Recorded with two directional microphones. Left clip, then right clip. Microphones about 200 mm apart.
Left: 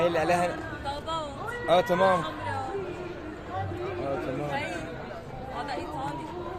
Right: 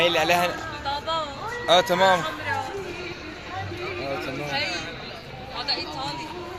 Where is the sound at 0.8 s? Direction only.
60° left (ahead or behind).